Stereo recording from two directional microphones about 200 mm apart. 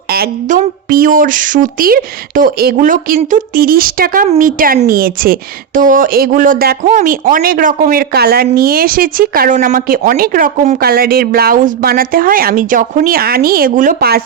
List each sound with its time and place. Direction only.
0.1 s a woman's voice: 45° right (ahead or behind)